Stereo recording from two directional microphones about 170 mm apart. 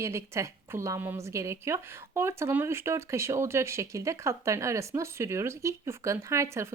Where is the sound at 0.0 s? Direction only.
15° right (ahead or behind).